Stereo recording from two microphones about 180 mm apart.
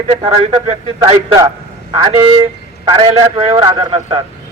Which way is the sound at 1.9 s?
25° right (ahead or behind).